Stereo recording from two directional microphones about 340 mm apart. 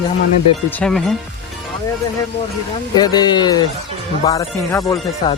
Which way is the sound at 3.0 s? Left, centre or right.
Centre.